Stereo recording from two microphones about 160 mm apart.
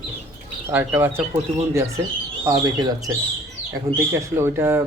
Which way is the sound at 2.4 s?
20° right (ahead or behind).